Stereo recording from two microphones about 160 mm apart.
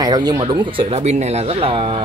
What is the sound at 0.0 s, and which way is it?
Speech, 25° right (ahead or behind).